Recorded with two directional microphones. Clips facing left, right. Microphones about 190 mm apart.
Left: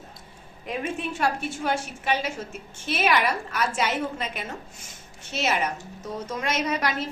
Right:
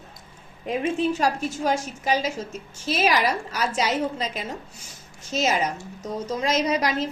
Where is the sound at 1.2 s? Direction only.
40° right (ahead or behind).